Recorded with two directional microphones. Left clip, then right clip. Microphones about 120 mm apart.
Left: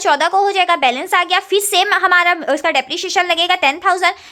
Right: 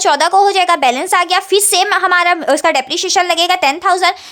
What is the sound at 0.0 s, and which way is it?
A woman's voice, 30° right (ahead or behind).